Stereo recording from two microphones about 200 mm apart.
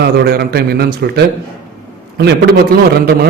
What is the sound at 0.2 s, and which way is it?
A man's voice, 50° right (ahead or behind).